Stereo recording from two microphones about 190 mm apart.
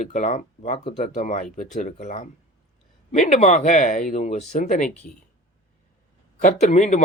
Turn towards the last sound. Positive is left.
turn(degrees=40)  # may be behind; listen again after turning